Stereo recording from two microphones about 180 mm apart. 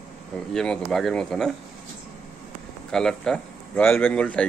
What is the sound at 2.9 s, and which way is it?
Speech, 5° left (ahead or behind).